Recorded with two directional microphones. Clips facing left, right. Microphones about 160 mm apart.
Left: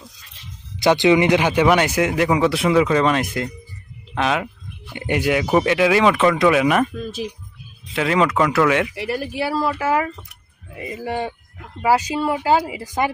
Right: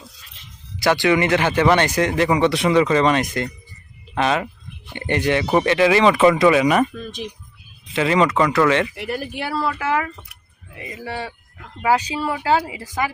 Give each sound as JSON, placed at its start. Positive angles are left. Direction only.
{"t": 0.8, "sound": "speech", "side_deg": 20}
{"t": 9.7, "sound": "speech", "side_deg": 35}
{"t": 11.0, "sound": "a man's voice", "side_deg": 20}
{"t": 11.8, "sound": "speech", "side_deg": 10}